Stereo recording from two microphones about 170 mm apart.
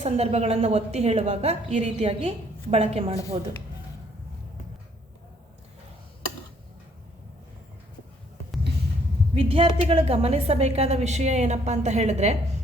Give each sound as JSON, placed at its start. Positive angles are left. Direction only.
{"t": 0.0, "sound": "a woman's voice", "side_deg": -40}
{"t": 9.3, "sound": "a woman's voice", "side_deg": -35}